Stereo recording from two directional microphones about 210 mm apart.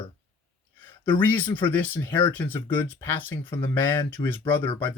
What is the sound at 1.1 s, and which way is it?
Speech, 10° left (ahead or behind).